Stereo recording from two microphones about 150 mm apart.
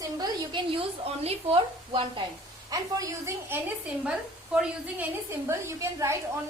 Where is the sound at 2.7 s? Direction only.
25° right (ahead or behind).